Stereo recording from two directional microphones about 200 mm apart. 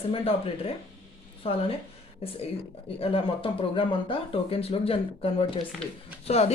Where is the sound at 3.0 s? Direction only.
25° left (ahead or behind).